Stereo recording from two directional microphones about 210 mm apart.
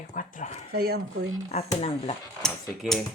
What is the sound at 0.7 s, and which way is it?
Speech, 50° right (ahead or behind).